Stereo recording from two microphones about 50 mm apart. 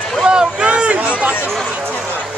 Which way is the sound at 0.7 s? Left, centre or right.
Right.